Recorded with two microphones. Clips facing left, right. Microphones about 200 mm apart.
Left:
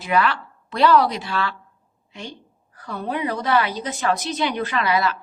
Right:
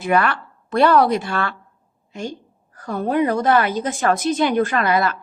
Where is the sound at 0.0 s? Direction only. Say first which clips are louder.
Right 2 dB; 50° right (ahead or behind).